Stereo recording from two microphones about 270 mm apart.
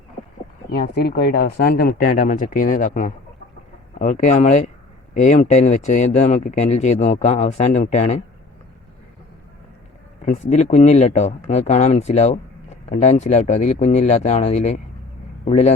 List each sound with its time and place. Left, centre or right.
0.7 s speech: left
10.2 s speech: left